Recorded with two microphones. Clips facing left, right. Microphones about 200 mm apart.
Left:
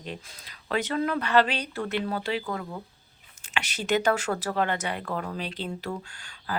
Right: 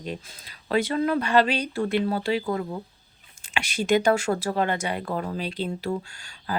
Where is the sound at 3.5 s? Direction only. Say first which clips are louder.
Right 4 dB; 10° right (ahead or behind).